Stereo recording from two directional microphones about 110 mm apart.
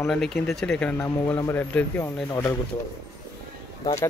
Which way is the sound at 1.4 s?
20° left (ahead or behind).